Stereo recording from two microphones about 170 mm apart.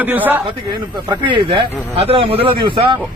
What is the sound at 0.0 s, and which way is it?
Speech, 10° right (ahead or behind).